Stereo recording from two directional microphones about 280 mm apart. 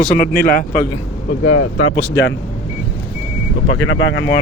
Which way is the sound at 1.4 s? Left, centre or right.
Left.